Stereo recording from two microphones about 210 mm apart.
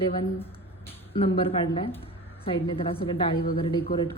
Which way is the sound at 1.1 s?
25° left (ahead or behind).